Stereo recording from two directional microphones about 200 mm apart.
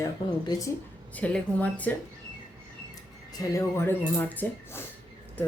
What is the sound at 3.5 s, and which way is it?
Speech, 15° left (ahead or behind).